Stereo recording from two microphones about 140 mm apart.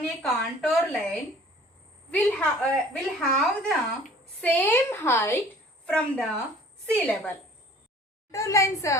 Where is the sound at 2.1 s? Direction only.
10° left (ahead or behind).